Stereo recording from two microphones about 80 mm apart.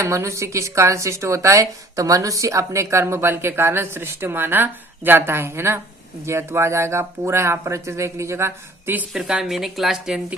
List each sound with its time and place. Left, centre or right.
0.0 s speech: right
9.1 s speech: centre